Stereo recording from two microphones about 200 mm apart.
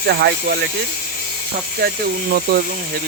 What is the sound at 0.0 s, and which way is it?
Speech, 55° right (ahead or behind).